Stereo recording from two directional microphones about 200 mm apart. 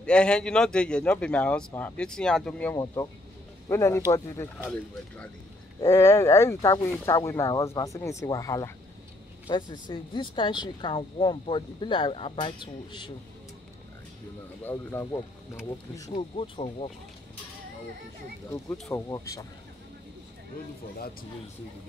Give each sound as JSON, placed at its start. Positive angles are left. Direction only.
{"t": 0.0, "sound": "speech", "side_deg": 5}
{"t": 14.6, "sound": "speech", "side_deg": 10}
{"t": 16.1, "sound": "speech", "side_deg": 30}
{"t": 18.5, "sound": "speech", "side_deg": 10}